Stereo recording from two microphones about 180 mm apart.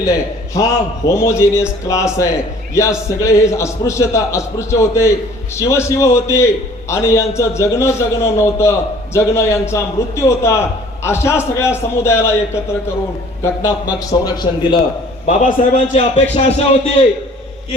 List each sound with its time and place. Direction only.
0.0 s a man's voice: 15° left (ahead or behind)
13.4 s a man's voice: 15° left (ahead or behind)
15.3 s a man's voice: 40° left (ahead or behind)